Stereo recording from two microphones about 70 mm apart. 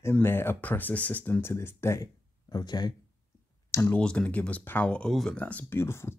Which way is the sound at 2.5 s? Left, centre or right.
Left.